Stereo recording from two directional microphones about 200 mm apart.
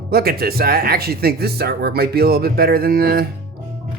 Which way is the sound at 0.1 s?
50° right (ahead or behind).